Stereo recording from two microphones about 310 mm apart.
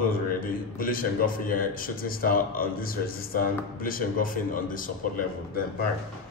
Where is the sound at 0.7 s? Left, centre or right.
Left.